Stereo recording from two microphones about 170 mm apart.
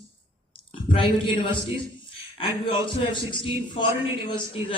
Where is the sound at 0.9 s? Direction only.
30° left (ahead or behind).